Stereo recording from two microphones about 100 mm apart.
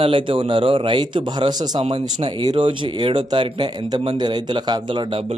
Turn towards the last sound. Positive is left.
turn(degrees=-55)  # may be behind; listen again after turning